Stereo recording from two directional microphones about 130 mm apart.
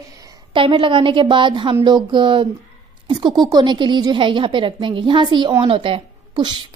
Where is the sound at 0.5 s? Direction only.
40° right (ahead or behind).